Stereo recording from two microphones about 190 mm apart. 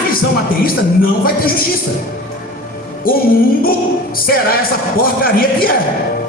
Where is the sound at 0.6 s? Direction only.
50° left (ahead or behind).